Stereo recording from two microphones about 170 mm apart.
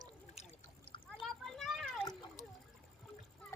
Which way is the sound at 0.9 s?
30° left (ahead or behind).